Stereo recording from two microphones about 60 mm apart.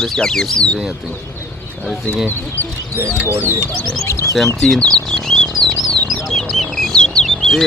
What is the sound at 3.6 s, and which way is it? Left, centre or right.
Speech, left.